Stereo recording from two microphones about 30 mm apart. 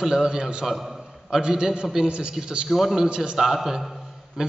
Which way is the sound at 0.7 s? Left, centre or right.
Centre.